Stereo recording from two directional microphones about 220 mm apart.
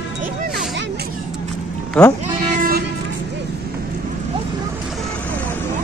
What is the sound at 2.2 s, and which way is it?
Bleat, 40° right (ahead or behind).